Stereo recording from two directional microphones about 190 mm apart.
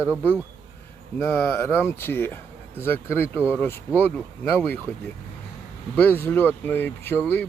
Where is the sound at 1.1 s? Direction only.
10° left (ahead or behind).